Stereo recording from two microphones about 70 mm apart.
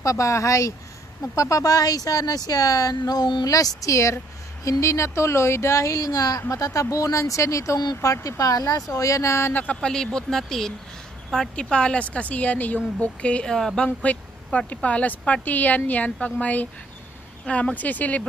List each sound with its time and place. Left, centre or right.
0.0 s speech: left
8.9 s speech: left
9.5 s speech: left
9.8 s speech: centre